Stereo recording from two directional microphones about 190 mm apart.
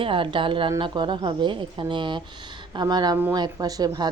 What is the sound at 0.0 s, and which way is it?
A woman's voice, 25° right (ahead or behind).